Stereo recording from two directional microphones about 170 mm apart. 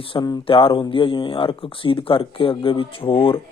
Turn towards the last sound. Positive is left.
turn(degrees=30)  # may be behind; listen again after turning